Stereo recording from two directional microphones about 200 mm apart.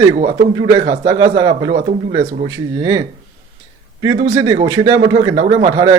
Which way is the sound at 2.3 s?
35° right (ahead or behind).